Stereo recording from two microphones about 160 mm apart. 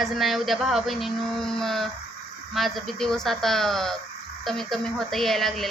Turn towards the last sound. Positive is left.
turn(degrees=0)  # may be behind; listen again after turning